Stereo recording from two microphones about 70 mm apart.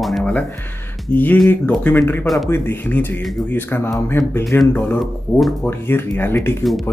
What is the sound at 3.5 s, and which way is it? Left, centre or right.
Speech, left.